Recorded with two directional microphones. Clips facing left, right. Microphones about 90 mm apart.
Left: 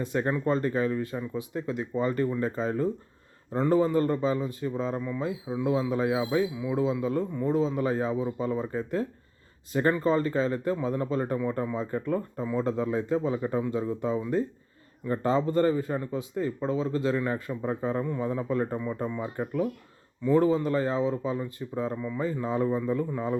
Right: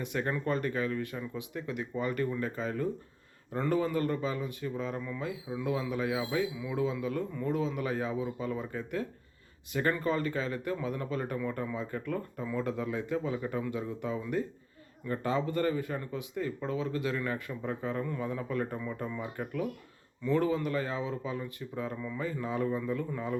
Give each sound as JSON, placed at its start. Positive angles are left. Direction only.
{"t": 0.0, "sound": "speech", "side_deg": 30}